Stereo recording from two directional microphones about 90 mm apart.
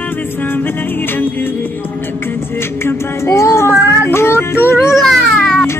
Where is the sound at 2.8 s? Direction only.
30° left (ahead or behind).